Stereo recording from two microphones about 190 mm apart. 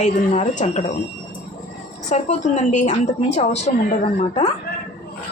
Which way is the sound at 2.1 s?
40° left (ahead or behind).